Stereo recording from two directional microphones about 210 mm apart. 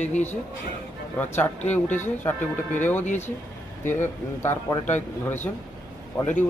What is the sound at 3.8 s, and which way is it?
Speech, 10° left (ahead or behind).